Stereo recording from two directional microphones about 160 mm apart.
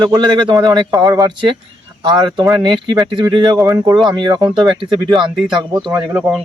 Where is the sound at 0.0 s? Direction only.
25° right (ahead or behind).